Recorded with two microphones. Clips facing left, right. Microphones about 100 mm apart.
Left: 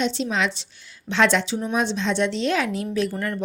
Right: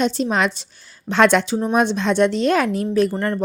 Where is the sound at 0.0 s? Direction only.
45° right (ahead or behind).